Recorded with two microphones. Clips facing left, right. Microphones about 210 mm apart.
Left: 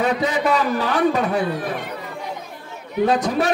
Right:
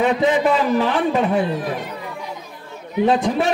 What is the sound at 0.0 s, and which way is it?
A man's voice, 40° left (ahead or behind).